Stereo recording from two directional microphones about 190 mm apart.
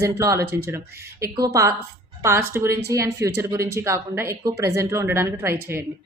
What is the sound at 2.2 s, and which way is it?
Speech, 10° right (ahead or behind).